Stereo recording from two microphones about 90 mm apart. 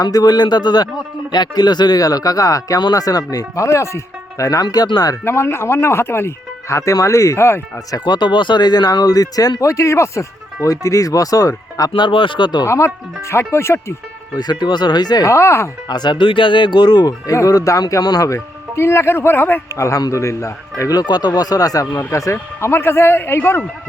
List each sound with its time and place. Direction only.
0.0 s speech: 45° left (ahead or behind)
5.2 s speech: 25° left (ahead or behind)
7.9 s speech: 45° left (ahead or behind)
11.9 s speech: 65° left (ahead or behind)
12.6 s speech: 30° left (ahead or behind)
14.3 s speech: 50° left (ahead or behind)
15.3 s speech: 30° left (ahead or behind)
15.9 s speech: 50° left (ahead or behind); by 19.6 s 25° left (ahead or behind)
19.7 s speech: 35° left (ahead or behind)